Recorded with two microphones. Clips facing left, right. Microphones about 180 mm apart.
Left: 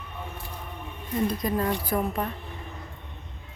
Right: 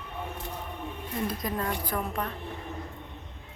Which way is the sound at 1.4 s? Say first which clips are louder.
Left 5 dB; centre (ahead or behind).